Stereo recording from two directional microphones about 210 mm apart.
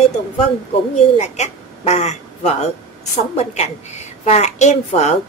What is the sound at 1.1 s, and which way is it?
A woman's voice, 35° left (ahead or behind).